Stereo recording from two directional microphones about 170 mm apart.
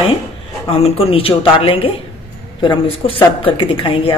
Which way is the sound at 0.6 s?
35° left (ahead or behind).